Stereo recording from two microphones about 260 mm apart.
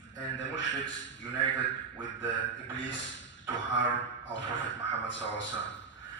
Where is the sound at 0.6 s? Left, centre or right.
Left.